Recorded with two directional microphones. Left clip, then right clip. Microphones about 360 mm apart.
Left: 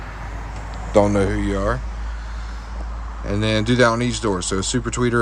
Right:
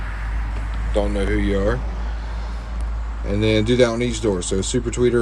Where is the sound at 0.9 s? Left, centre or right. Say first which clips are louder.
Left 6 dB; left.